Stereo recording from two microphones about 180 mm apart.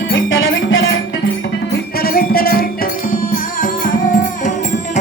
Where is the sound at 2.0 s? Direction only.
55° left (ahead or behind).